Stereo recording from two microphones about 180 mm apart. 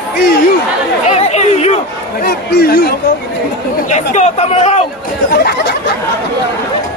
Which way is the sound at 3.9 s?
40° left (ahead or behind).